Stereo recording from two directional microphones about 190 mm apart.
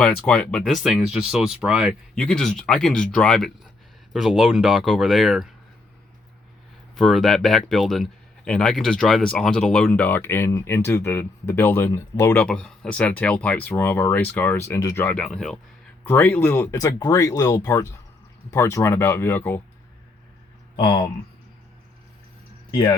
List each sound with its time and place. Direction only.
0.0 s speech: 5° left (ahead or behind)
6.9 s speech: centre (ahead or behind)
20.7 s speech: 25° left (ahead or behind)
22.7 s speech: 25° left (ahead or behind)